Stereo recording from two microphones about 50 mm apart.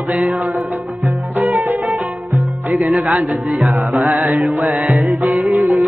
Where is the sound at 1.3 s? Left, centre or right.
Right.